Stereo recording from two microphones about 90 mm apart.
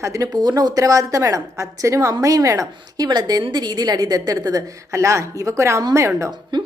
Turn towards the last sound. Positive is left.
turn(degrees=-55)  # may be behind; listen again after turning